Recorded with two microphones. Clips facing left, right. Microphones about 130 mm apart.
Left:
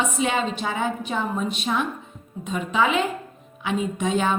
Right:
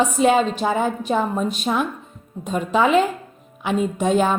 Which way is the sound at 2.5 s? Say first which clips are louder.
Right 4 dB; 45° right (ahead or behind).